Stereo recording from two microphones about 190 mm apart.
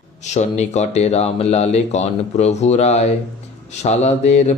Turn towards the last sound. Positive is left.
turn(degrees=35)  # may be behind; listen again after turning